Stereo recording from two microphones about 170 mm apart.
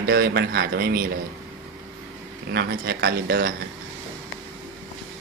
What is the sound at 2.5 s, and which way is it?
Speech, 70° right (ahead or behind).